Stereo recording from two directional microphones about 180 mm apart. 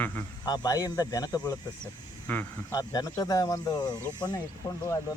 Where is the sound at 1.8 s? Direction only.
10° left (ahead or behind).